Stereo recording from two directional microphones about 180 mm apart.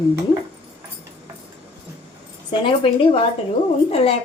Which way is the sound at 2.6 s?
30° left (ahead or behind).